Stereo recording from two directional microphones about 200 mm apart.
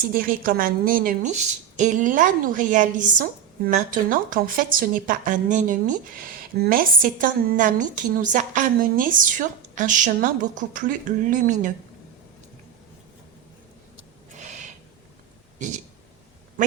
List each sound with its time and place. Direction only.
0.1 s speech: 45° right (ahead or behind)
14.3 s snort: 35° right (ahead or behind)
15.5 s speech: 40° right (ahead or behind)